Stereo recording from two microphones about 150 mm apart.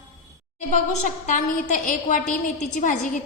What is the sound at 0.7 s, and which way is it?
A woman's voice, 55° left (ahead or behind).